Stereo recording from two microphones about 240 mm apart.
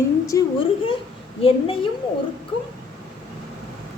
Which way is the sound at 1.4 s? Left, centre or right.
Left.